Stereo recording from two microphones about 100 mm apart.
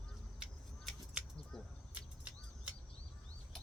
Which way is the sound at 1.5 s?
5° left (ahead or behind).